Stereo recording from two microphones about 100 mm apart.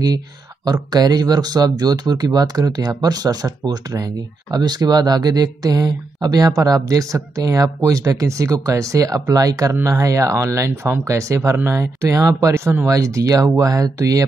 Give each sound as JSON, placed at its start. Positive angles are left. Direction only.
{"t": 0.7, "sound": "speech", "side_deg": -40}